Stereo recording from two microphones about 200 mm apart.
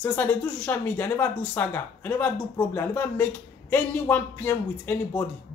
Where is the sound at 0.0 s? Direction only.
5° left (ahead or behind).